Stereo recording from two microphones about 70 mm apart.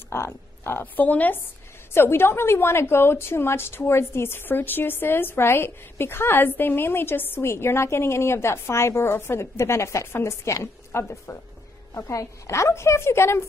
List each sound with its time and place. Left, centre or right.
0.1 s a woman's voice: left
2.0 s a woman's voice: left
11.9 s a woman's voice: left